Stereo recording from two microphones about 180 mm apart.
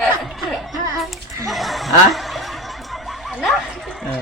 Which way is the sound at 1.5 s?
Centre (ahead or behind).